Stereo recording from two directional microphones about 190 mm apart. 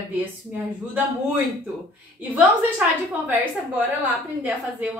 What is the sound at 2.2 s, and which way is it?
Speech, 10° right (ahead or behind).